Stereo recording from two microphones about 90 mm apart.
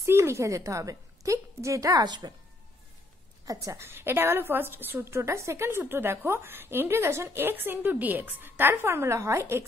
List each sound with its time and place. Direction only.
0.0 s a woman's voice: 30° right (ahead or behind); by 2.3 s 50° right (ahead or behind)
3.4 s a woman's voice: 35° right (ahead or behind)